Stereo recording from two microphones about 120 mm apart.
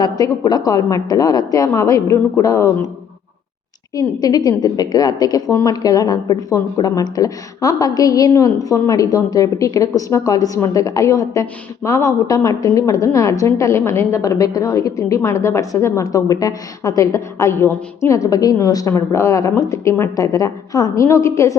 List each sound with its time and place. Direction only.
0.0 s speech: 35° left (ahead or behind)
3.9 s a woman's voice: 35° left (ahead or behind)